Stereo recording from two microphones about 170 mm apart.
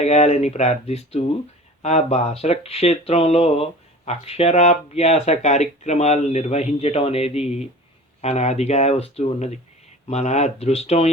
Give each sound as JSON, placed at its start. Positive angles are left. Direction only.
{"t": 0.0, "sound": "speech", "side_deg": 40}